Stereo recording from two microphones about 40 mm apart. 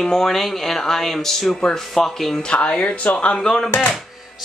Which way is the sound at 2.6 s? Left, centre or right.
Left.